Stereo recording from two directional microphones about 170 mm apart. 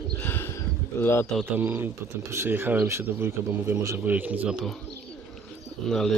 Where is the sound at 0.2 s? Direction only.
10° left (ahead or behind).